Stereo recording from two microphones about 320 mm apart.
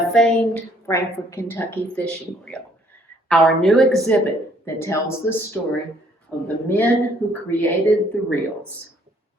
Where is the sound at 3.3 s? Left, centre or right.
Centre.